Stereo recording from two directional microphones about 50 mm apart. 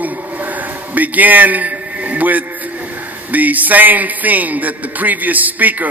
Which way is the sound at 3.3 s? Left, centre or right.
Right.